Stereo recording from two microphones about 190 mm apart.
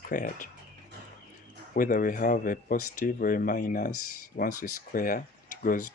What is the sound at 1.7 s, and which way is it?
Speech, 45° left (ahead or behind).